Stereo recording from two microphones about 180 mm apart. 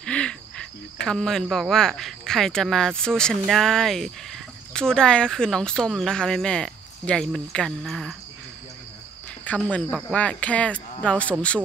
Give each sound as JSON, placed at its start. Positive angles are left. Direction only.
{"t": 0.0, "sound": "cricket", "side_deg": 5}
{"t": 9.4, "sound": "speech", "side_deg": 10}